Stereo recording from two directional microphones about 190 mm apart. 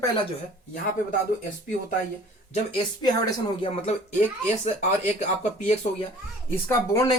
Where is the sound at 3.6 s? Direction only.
40° left (ahead or behind).